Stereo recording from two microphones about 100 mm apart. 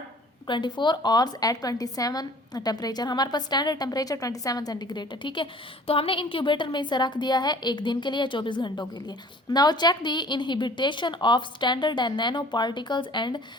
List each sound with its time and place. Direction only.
0.4 s a woman's voice: 50° left (ahead or behind)